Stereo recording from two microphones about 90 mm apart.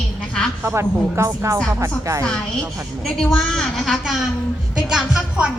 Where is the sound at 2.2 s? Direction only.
5° left (ahead or behind).